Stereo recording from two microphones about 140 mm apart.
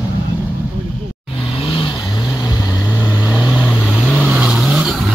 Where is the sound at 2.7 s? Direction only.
10° right (ahead or behind).